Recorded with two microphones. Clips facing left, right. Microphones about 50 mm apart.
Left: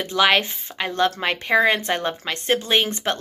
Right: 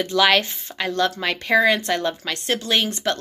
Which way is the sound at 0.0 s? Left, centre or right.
Centre.